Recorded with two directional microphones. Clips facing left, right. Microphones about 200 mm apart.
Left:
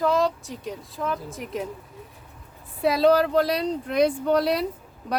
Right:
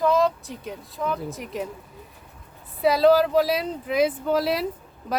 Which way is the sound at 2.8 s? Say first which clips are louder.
Right 1 dB; centre (ahead or behind).